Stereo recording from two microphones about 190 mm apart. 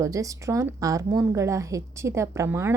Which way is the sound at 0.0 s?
15° right (ahead or behind).